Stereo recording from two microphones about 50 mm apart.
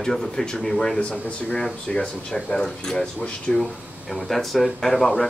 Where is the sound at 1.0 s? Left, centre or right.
Left.